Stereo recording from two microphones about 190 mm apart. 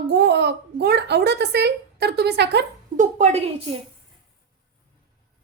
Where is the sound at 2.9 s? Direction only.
35° right (ahead or behind).